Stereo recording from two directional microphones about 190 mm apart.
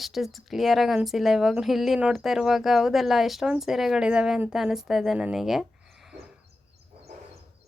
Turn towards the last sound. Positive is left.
turn(degrees=0)  # may be behind; listen again after turning